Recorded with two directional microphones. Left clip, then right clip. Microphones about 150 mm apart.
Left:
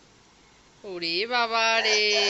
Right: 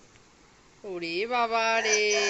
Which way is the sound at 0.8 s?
10° right (ahead or behind).